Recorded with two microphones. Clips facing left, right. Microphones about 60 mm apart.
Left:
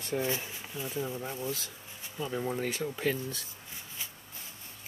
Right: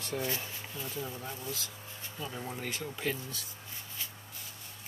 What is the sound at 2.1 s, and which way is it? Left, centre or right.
Speech, centre.